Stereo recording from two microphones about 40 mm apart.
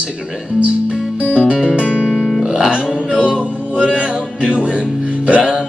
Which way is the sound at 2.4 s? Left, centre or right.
Right.